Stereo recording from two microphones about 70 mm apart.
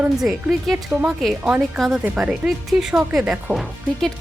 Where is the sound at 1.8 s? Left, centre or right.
Centre.